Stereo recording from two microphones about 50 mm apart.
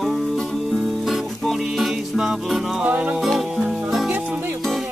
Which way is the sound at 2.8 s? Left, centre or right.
Right.